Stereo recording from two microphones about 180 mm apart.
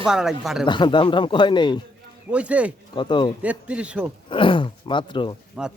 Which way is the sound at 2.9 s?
25° left (ahead or behind).